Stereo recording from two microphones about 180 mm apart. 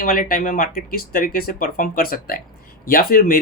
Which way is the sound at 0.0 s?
50° left (ahead or behind).